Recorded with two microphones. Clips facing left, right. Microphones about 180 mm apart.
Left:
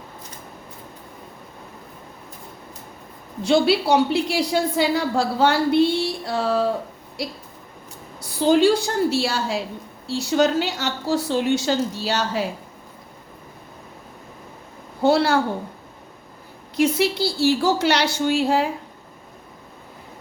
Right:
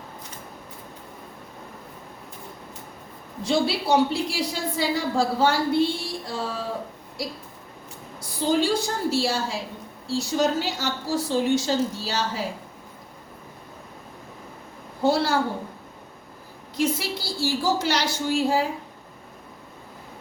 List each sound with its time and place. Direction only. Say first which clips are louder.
3.4 s a woman's voice: left 5 dB; 70° left (ahead or behind)
8.4 s a woman's voice: left 6 dB; 70° left (ahead or behind)
15.0 s a woman's voice: left 4 dB; 65° left (ahead or behind)
16.7 s a woman's voice: left 6 dB; 70° left (ahead or behind)